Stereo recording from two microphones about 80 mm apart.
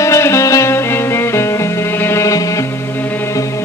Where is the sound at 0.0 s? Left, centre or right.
Left.